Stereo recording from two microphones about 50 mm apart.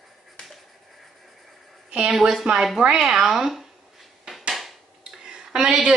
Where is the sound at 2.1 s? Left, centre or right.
Centre.